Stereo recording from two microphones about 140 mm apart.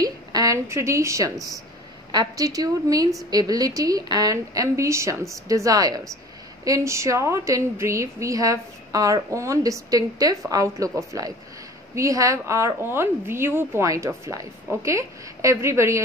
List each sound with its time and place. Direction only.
0.0 s a woman's voice: 25° right (ahead or behind)